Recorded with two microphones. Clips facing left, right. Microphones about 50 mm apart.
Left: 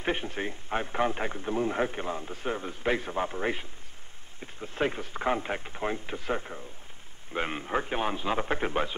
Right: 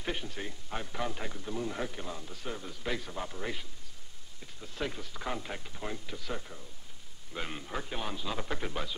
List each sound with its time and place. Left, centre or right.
0.0 s speech: left